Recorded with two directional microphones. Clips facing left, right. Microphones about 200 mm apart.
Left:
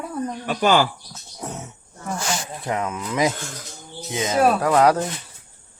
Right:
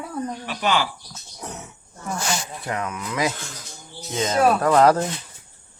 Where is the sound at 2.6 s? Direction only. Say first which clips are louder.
Left 4 dB; 20° left (ahead or behind); by 5.0 s centre (ahead or behind).